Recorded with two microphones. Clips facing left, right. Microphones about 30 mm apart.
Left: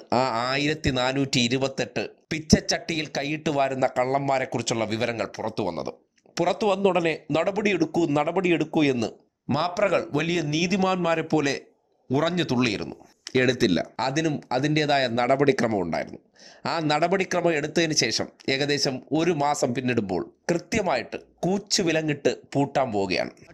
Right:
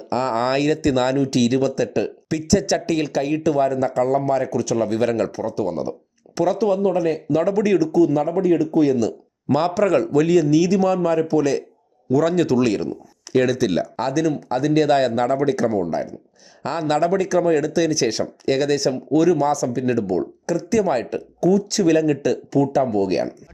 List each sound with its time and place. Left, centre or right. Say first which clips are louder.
0.1 s speech: right 3 dB; left
1.1 s speech: right 5 dB; left
3.4 s speech: right 2 dB; left
5.0 s speech: right 7 dB; left
5.5 s speech: right 5 dB; left
6.6 s speech: right 1 dB; left
7.0 s speech: right 4 dB; left
7.9 s a man's voice: right 5 dB; left
9.5 s speech: right 5 dB; centre
10.1 s speech: right 9 dB; left
12.2 s speech: right 6 dB; left
13.9 s speech: right 4 dB; left
21.9 s speech: right 6 dB; left
22.7 s speech: right 5 dB; left